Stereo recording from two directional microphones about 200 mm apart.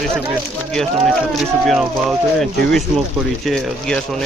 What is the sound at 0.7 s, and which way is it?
Speech, centre (ahead or behind).